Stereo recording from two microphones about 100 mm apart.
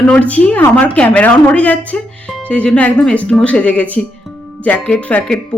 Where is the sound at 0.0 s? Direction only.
15° left (ahead or behind).